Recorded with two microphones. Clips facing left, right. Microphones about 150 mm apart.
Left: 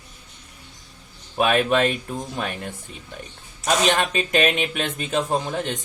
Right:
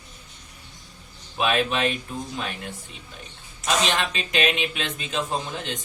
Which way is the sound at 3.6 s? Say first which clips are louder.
Left 4 dB; 50° left (ahead or behind).